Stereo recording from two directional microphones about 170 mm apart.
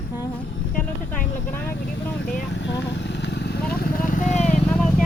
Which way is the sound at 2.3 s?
90° left.